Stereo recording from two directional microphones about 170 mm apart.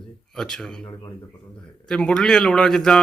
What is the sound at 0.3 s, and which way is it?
Speech, 5° left (ahead or behind).